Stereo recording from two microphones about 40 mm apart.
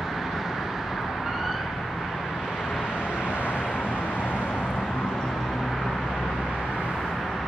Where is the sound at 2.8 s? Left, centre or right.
Right.